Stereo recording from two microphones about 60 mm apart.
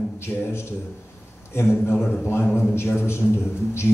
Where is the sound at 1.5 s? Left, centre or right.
Left.